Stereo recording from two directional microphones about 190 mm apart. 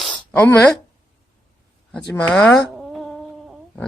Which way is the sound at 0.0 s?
5° left (ahead or behind).